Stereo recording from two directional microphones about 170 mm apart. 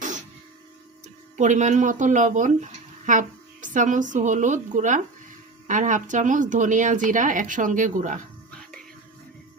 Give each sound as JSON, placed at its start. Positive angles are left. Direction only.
{"t": 1.4, "sound": "a woman's voice", "side_deg": -45}